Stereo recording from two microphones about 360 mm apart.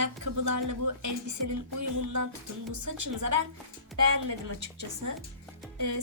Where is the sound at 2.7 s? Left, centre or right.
Right.